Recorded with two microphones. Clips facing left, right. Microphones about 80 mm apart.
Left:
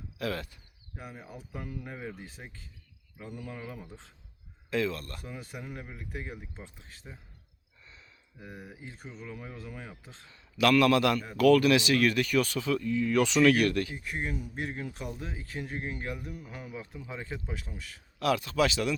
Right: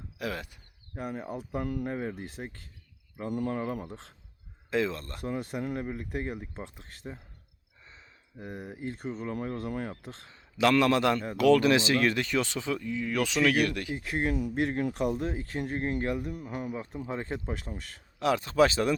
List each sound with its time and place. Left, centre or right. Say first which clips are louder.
0.2 s speech: left 1 dB; centre
0.9 s speech: right 9 dB; right
4.7 s speech: right 1 dB; right
5.2 s speech: right 9 dB; right
8.4 s speech: right 6 dB; right
10.2 s a man's voice: even; right
12.8 s speech: left 4 dB; centre
13.1 s speech: left 2 dB; centre
13.9 s speech: right 6 dB; right
15.5 s speech: right 4 dB; right
18.2 s speech: right 3 dB; right